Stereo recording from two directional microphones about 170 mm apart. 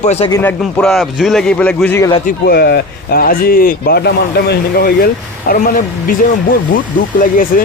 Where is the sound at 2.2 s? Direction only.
65° left (ahead or behind).